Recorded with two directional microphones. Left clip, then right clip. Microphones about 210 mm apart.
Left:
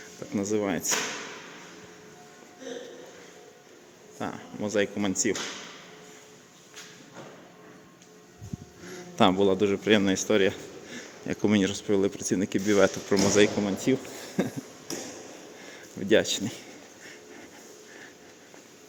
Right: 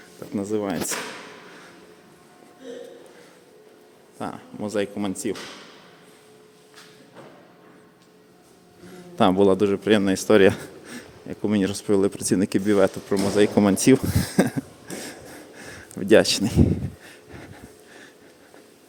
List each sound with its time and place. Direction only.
0.3 s speech: 10° right (ahead or behind)
4.2 s speech: 15° right (ahead or behind)
9.1 s a man's voice: 15° right (ahead or behind)
9.4 s speech: 25° right (ahead or behind)
11.3 s speech: 5° right (ahead or behind)
11.6 s speech: 25° right (ahead or behind)
13.6 s speech: 35° right (ahead or behind)
15.6 s a sound: 25° right (ahead or behind)